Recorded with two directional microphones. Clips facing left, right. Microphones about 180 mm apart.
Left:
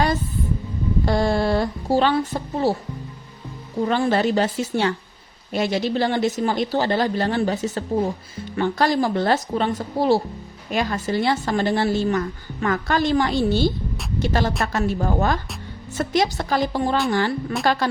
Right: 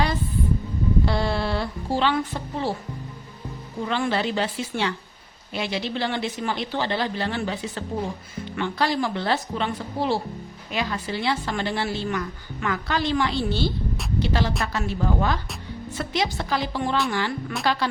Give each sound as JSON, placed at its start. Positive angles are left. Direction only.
{"t": 1.0, "sound": "a woman's voice", "side_deg": 45}
{"t": 3.8, "sound": "a woman's voice", "side_deg": 40}